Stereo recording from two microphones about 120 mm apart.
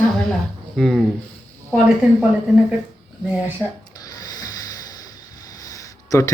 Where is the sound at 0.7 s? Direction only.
Centre (ahead or behind).